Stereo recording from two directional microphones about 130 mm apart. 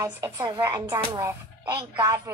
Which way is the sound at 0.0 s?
25° right (ahead or behind).